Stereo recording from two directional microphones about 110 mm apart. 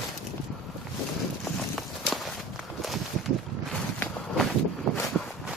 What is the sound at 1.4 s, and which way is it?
Walk, centre (ahead or behind).